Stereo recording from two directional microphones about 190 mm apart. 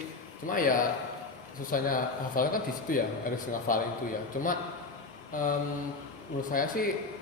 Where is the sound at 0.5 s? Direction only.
45° left (ahead or behind).